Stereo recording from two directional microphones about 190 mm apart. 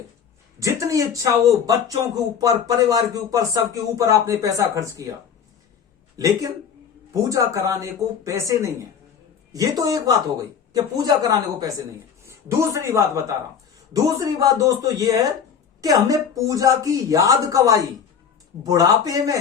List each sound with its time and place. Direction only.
0.6 s speech: 15° right (ahead or behind)
6.1 s speech: 15° right (ahead or behind)